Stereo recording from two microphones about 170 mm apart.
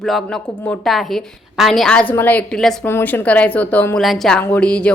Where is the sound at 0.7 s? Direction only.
Centre (ahead or behind).